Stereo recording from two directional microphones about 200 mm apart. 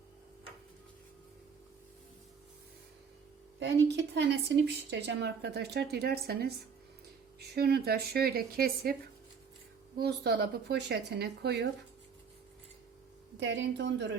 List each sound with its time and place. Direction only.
3.6 s a woman's voice: 60° right (ahead or behind)
10.0 s speech: 55° right (ahead or behind)
13.3 s speech: 60° right (ahead or behind)